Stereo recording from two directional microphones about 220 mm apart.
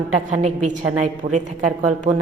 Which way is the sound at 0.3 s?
35° right (ahead or behind).